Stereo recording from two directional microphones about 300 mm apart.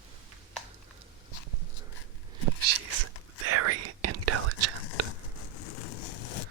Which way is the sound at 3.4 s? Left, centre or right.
Right.